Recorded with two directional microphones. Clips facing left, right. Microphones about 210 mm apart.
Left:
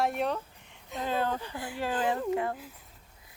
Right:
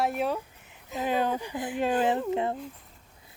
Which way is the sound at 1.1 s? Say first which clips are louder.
Right 3 dB; 15° right (ahead or behind).